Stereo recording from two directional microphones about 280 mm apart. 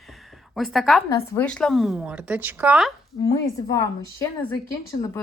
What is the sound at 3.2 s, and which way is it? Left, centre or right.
A woman's voice, centre.